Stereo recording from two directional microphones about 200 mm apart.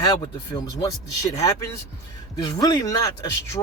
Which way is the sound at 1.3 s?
15° left (ahead or behind).